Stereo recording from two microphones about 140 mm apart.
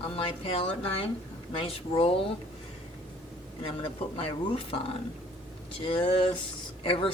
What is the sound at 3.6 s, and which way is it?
Speech, 40° left (ahead or behind).